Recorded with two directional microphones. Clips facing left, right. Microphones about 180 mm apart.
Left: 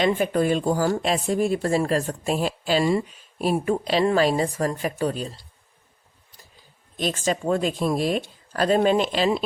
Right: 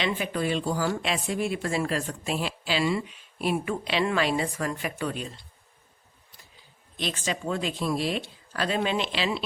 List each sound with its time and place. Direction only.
0.0 s speech: 45° left (ahead or behind)
6.9 s speech: 45° left (ahead or behind)